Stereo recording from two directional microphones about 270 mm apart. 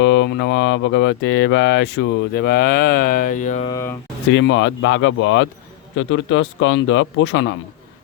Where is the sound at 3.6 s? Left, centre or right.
Centre.